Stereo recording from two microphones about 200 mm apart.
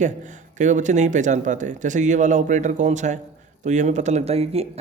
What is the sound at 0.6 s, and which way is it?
Speech, 35° right (ahead or behind).